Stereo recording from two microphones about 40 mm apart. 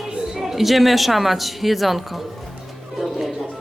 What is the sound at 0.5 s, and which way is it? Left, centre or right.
Speech, centre.